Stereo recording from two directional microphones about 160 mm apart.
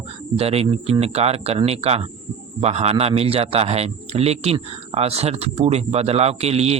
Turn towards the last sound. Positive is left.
turn(degrees=-40)  # may be behind; listen again after turning